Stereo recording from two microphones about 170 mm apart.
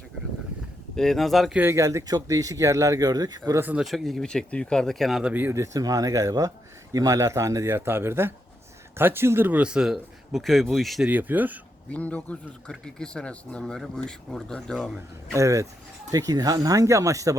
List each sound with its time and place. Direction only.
0.9 s a man's voice: centre (ahead or behind)
1.6 s speech: 15° right (ahead or behind)
11.9 s a man's voice: 10° left (ahead or behind)
15.3 s speech: 20° right (ahead or behind)